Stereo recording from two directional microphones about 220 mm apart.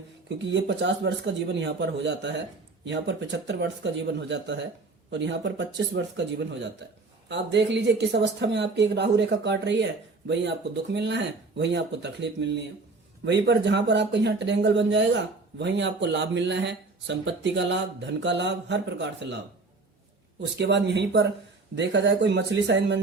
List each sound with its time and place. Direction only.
0.3 s speech: 50° right (ahead or behind)
20.4 s speech: 50° right (ahead or behind)